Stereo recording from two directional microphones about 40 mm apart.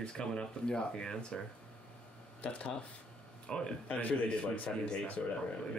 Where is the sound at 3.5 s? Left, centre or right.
Left.